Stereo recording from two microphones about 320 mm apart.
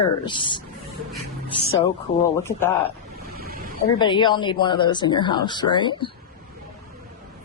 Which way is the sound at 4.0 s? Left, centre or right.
Centre.